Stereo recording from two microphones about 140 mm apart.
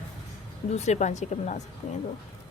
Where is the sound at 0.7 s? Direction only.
55° left (ahead or behind).